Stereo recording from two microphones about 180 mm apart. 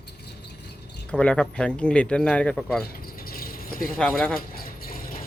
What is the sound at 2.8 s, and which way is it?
Keys jangling, 55° left (ahead or behind).